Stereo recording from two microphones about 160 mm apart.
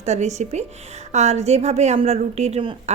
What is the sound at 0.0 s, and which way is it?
A woman's voice, 45° right (ahead or behind).